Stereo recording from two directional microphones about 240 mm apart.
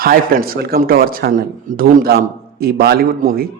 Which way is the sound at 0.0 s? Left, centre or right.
Right.